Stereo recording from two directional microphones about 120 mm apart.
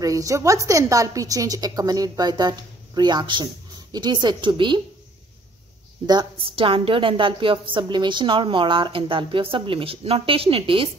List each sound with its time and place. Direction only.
0.0 s a woman's voice: 30° right (ahead or behind)
6.0 s a woman's voice: 40° right (ahead or behind)